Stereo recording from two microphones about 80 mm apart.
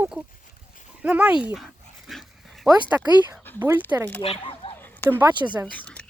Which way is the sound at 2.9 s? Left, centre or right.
Right.